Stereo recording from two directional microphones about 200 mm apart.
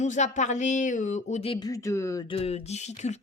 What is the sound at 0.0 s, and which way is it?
Speech, 35° left (ahead or behind).